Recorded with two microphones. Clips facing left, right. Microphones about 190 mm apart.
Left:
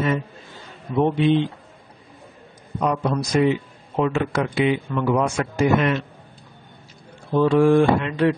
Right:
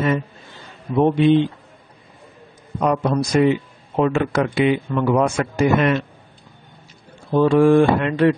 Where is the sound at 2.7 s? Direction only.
50° right (ahead or behind).